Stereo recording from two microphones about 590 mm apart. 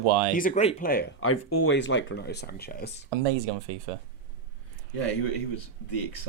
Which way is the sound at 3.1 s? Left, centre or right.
Right.